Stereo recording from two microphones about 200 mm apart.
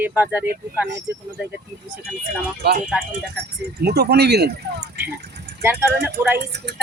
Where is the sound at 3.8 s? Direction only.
55° right (ahead or behind).